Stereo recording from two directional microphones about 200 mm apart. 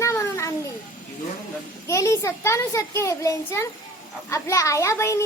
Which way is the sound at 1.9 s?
15° left (ahead or behind).